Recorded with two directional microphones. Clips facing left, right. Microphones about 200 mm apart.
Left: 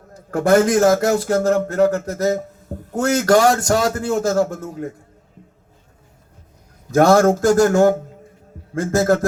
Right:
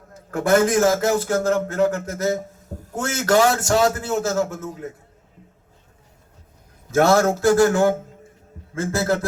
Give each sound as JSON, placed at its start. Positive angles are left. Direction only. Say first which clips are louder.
{"t": 0.3, "sound": "a man's voice", "louder": "left 3 dB", "side_deg": 45}
{"t": 6.9, "sound": "speech", "louder": "left 4 dB", "side_deg": 45}